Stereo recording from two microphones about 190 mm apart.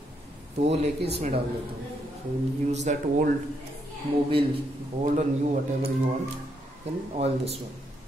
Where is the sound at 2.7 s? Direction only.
35° right (ahead or behind).